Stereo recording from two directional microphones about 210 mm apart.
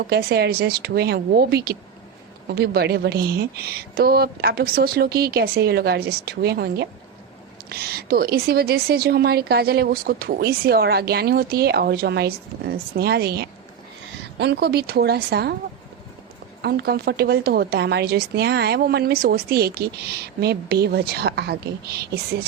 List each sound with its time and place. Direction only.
0.1 s a woman's voice: 50° right (ahead or behind)
16.6 s a woman's voice: 50° right (ahead or behind)